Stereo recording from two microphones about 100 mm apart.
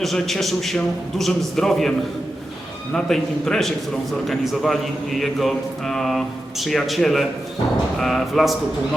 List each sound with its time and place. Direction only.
0.0 s speech: centre (ahead or behind)
2.9 s speech: 5° left (ahead or behind)